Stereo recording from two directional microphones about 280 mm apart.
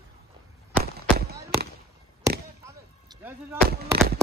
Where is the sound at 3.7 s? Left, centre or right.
Right.